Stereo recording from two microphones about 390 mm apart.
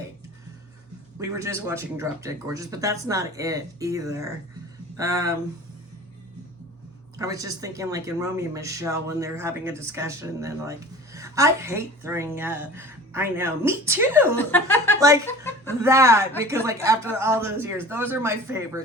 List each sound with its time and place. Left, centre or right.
1.2 s speech: centre
7.2 s speech: centre
14.3 s speech: centre
14.9 s speech: centre
15.3 s chuckle: centre
15.8 s speech: centre